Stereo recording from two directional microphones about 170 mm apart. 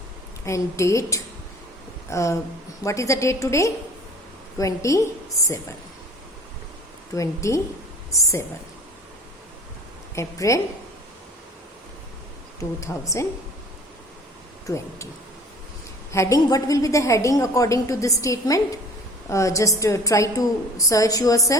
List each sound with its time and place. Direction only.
0.4 s a woman's voice: 15° left (ahead or behind)
7.2 s a woman's voice: 15° left (ahead or behind)
10.2 s a woman's voice: 20° left (ahead or behind)
12.5 s a woman's voice: 20° left (ahead or behind)
16.1 s a woman's voice: 20° left (ahead or behind)